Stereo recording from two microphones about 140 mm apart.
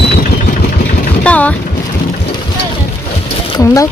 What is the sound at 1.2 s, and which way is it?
Boat, 10° left (ahead or behind).